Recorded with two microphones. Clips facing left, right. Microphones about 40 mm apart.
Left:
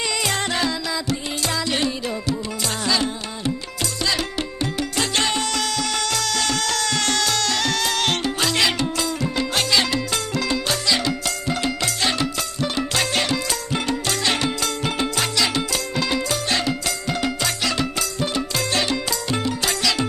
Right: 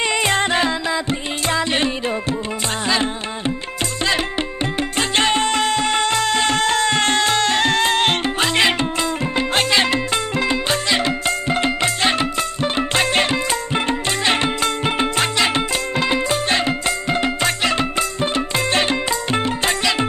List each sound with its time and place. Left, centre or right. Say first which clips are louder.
0.0 s music: right 5 dB; right